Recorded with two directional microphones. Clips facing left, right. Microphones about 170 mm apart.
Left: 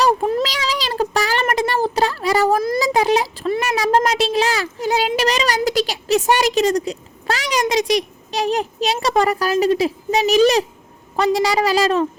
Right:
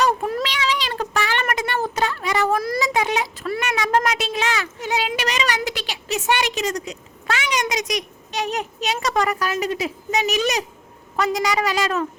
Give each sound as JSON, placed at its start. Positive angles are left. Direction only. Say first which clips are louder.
{"t": 0.0, "sound": "child singing", "louder": "left 4 dB", "side_deg": 25}
{"t": 0.4, "sound": "meow", "louder": "left 1 dB", "side_deg": 35}
{"t": 3.6, "sound": "speech", "louder": "left 3 dB", "side_deg": 30}